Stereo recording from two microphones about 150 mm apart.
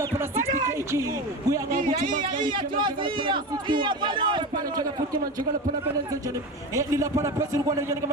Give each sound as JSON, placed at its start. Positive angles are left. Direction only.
{"t": 0.0, "sound": "a sound", "side_deg": -15}
{"t": 1.7, "sound": "speech", "side_deg": -55}
{"t": 2.4, "sound": "a man's voice", "side_deg": -30}